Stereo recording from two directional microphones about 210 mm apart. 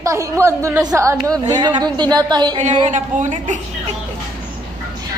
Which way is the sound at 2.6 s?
30° right (ahead or behind).